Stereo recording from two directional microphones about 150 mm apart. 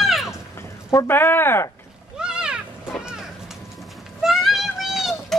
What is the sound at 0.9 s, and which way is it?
Music, 15° left (ahead or behind).